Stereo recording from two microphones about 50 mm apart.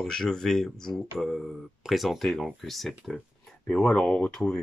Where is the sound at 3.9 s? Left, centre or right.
Centre.